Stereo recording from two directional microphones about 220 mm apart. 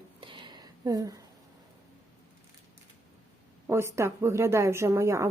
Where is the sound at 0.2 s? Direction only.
20° right (ahead or behind).